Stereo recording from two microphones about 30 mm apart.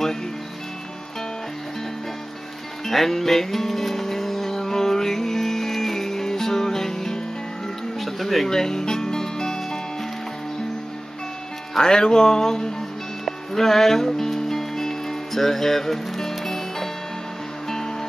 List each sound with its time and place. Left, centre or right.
2.9 s music: centre
8.0 s a sound: centre
8.5 s music: centre
11.7 s speech: left
13.2 s music: centre